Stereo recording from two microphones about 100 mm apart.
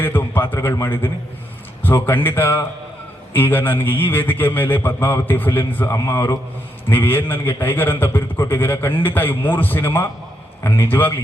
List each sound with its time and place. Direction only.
0.0 s a man's voice: 20° left (ahead or behind)
1.8 s a man's voice: 20° left (ahead or behind)